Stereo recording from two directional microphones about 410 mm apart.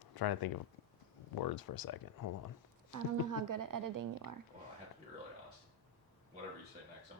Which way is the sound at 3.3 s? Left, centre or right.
Right.